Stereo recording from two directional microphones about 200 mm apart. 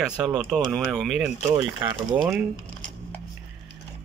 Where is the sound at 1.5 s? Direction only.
20° right (ahead or behind).